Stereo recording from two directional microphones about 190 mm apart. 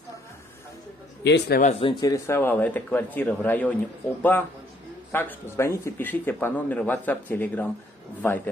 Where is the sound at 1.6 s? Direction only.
35° left (ahead or behind).